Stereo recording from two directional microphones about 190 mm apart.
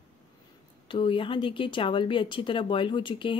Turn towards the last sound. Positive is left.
turn(degrees=25)  # may be behind; listen again after turning